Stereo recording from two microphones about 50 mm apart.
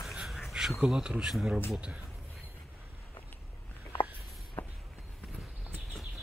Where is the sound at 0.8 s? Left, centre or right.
Centre.